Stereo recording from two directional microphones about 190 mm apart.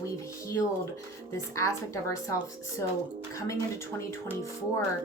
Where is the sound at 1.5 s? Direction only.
15° left (ahead or behind).